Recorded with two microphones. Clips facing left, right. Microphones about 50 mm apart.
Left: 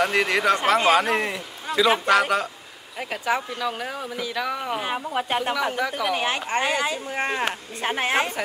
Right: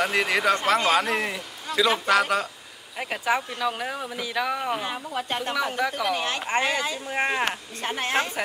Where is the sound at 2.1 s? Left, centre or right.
Centre.